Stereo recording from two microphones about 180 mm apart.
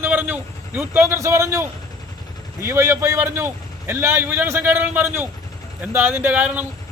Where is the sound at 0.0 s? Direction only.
10° right (ahead or behind).